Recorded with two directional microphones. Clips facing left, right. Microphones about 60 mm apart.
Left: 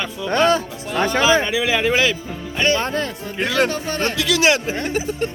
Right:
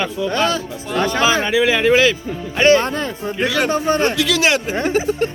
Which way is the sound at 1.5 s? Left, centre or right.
Centre.